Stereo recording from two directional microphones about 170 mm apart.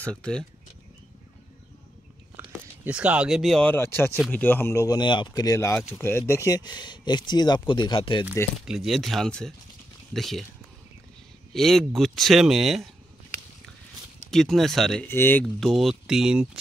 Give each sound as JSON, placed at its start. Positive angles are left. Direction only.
{"t": 0.0, "sound": "speech", "side_deg": 5}
{"t": 2.3, "sound": "speech", "side_deg": -10}
{"t": 8.6, "sound": "speech", "side_deg": 0}
{"t": 11.5, "sound": "speech", "side_deg": 0}
{"t": 14.3, "sound": "speech", "side_deg": 0}
{"t": 15.0, "sound": "speech", "side_deg": 15}
{"t": 15.4, "sound": "speech", "side_deg": 0}